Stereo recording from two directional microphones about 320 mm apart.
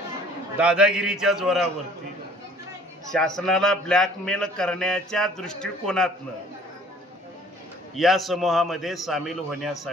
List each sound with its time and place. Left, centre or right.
0.6 s speech: centre
3.1 s speech: centre
7.9 s speech: centre